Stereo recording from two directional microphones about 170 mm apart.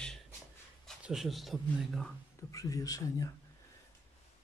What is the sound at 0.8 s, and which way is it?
Speech, centre (ahead or behind).